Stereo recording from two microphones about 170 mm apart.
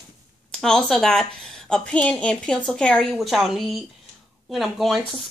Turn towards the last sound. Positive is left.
turn(degrees=0)  # may be behind; listen again after turning